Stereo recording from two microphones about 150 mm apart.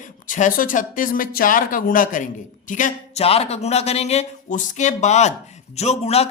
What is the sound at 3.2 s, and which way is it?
Speech, 45° left (ahead or behind).